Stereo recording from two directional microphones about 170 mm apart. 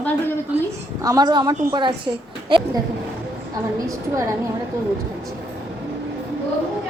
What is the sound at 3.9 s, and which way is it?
Speech, 20° right (ahead or behind).